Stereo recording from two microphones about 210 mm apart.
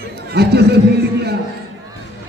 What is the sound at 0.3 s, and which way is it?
Speech, 50° right (ahead or behind).